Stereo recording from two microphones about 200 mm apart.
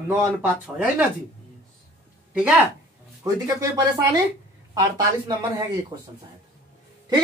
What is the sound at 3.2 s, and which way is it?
Speech, 15° right (ahead or behind).